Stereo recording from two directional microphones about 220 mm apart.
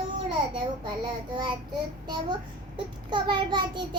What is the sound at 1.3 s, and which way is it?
A child's voice, 20° right (ahead or behind).